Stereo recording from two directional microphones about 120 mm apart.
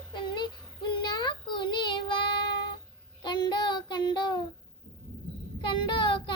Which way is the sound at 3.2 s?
40° left (ahead or behind).